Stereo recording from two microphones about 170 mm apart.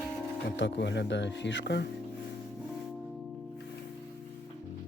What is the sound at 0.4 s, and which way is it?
Speech, 90° left.